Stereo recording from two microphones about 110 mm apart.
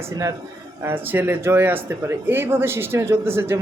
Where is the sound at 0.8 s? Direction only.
20° right (ahead or behind).